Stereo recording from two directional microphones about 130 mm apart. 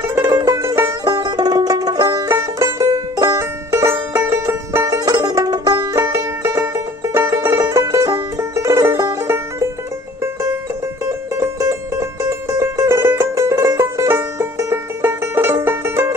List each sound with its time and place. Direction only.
0.0 s music: 20° right (ahead or behind)
11.1 s music: 20° right (ahead or behind)